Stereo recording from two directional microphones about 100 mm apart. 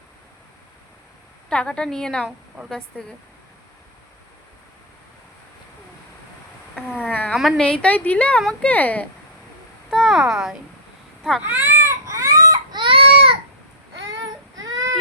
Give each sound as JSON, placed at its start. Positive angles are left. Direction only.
{"t": 1.5, "sound": "a woman's voice", "side_deg": 10}
{"t": 6.7, "sound": "a sound", "side_deg": -5}
{"t": 7.1, "sound": "cat", "side_deg": 15}
{"t": 7.3, "sound": "a woman's voice", "side_deg": 0}
{"t": 7.6, "sound": "a woman's voice", "side_deg": 10}
{"t": 9.9, "sound": "a sound", "side_deg": 0}
{"t": 11.4, "sound": "baby cry", "side_deg": -25}